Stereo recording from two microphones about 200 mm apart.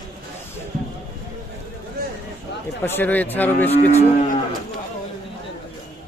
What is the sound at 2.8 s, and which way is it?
Speech, 10° left (ahead or behind).